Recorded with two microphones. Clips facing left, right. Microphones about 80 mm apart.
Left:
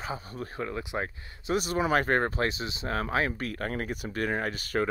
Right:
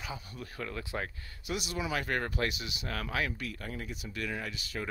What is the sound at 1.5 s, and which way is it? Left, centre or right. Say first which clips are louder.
Speech: left 9 dB; left.